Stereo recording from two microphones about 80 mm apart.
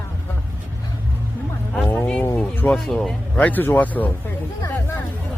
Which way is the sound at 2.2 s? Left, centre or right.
Left.